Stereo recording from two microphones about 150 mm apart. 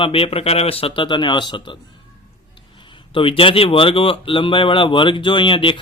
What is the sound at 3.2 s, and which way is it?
Speech, 35° left (ahead or behind).